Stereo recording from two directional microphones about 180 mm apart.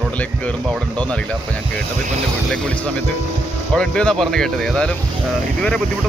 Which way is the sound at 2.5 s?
5° left (ahead or behind).